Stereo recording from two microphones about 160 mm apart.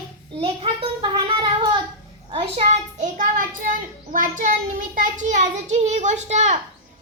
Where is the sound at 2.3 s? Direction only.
45° right (ahead or behind).